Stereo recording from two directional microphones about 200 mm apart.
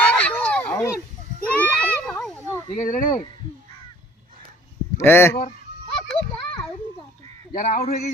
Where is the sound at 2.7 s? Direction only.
40° left (ahead or behind).